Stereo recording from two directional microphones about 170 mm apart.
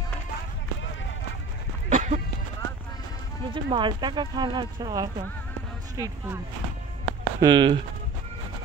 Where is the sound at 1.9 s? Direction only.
45° right (ahead or behind).